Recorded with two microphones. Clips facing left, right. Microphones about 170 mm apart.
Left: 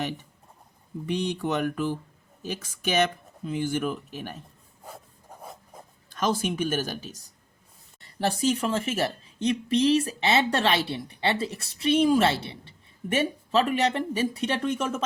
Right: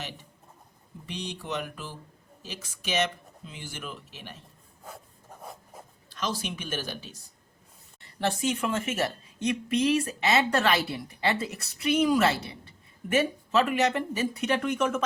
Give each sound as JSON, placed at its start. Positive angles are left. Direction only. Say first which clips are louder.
{"t": 1.0, "sound": "speech", "louder": "left 9 dB", "side_deg": 55}
{"t": 5.4, "sound": "a sound", "louder": "even", "side_deg": 0}
{"t": 6.1, "sound": "speech", "louder": "left 6 dB", "side_deg": 50}